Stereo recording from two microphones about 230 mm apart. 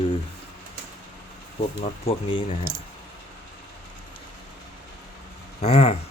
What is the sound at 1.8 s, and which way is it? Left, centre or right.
Speech, left.